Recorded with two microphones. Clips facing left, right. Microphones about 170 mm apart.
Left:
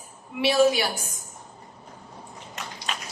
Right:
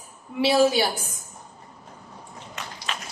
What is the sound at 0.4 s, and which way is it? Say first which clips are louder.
Speech: right 1 dB; 30° right (ahead or behind).